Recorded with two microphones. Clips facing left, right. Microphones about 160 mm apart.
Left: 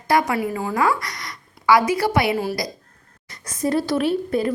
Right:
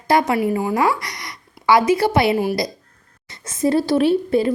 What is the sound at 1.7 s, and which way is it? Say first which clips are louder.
A woman's voice: right 2 dB; 25° right (ahead or behind).